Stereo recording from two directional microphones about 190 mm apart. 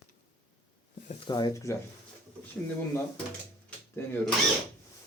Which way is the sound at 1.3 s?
20° left (ahead or behind).